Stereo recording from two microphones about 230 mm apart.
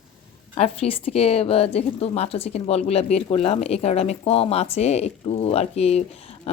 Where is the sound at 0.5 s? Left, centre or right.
Left.